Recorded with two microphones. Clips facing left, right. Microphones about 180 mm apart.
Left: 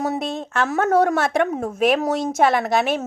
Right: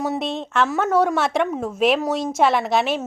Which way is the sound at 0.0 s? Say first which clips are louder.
Even; 45° left (ahead or behind).